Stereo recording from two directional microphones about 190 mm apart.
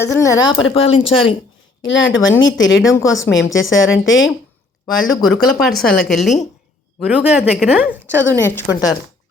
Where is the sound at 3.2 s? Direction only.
90° left.